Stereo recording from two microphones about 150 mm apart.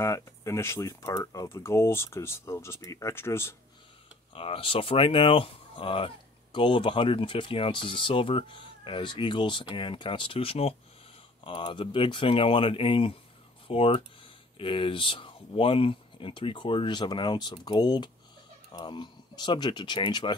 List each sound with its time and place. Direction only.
0.0 s speech: 20° left (ahead or behind)
4.3 s speech: 40° left (ahead or behind)